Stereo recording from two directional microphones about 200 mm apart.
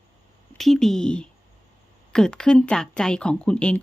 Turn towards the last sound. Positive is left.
turn(degrees=5)  # may be behind; listen again after turning